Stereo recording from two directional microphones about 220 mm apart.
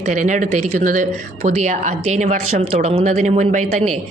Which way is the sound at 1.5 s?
30° right (ahead or behind).